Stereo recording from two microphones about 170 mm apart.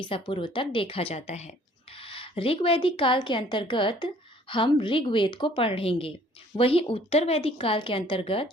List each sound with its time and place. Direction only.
0.0 s a woman's voice: 30° left (ahead or behind)